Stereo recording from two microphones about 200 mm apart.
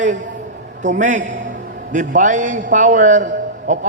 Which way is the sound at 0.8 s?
35° right (ahead or behind).